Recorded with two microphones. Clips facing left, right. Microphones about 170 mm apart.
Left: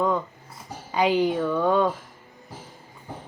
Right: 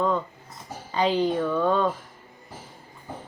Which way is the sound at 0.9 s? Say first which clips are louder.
Left 1 dB; 10° left (ahead or behind).